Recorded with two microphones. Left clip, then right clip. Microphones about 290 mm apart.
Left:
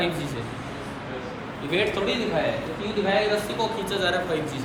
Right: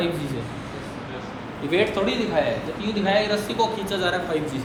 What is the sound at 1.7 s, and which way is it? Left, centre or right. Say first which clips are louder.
Speech: right 2 dB; right.